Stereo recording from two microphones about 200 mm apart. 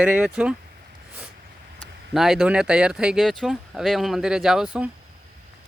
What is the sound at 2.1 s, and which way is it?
Speech, centre (ahead or behind).